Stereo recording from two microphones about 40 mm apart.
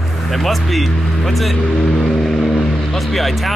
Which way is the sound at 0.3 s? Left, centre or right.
Centre.